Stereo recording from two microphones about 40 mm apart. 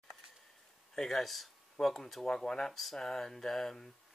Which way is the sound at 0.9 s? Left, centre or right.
Centre.